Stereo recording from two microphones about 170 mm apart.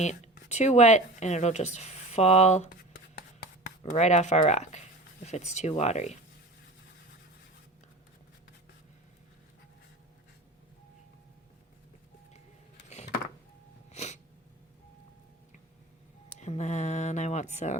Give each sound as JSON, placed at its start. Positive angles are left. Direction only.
{"t": 0.0, "sound": "speech", "side_deg": 40}
{"t": 3.9, "sound": "speech", "side_deg": 45}
{"t": 13.9, "sound": "sneeze", "side_deg": 40}
{"t": 16.4, "sound": "speech", "side_deg": 40}